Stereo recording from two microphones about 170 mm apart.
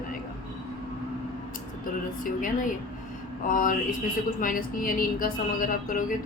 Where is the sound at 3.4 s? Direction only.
50° left (ahead or behind).